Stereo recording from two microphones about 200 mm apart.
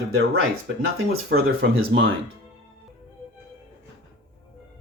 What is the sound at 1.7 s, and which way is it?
Speech, 80° right.